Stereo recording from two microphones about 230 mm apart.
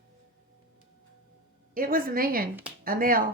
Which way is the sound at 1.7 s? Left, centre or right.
Right.